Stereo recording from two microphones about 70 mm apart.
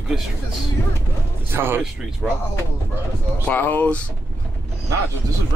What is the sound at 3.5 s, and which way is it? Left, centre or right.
Speech, left.